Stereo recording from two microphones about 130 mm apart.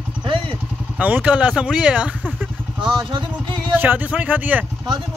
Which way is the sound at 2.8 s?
40° right (ahead or behind).